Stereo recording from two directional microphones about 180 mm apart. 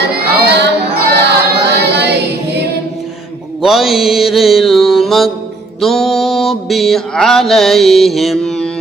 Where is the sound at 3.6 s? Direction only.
Centre (ahead or behind).